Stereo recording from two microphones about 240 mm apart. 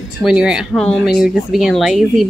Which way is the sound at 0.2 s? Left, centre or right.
Centre.